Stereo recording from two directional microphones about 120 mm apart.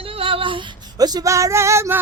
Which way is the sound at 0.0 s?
50° right (ahead or behind).